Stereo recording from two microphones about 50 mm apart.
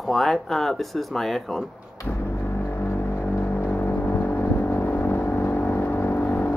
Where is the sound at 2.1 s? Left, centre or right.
Left.